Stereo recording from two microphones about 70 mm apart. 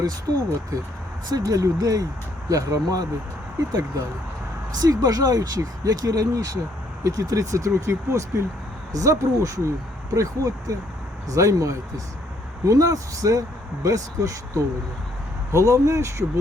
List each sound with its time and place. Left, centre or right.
0.0 s speech: right
4.8 s speech: right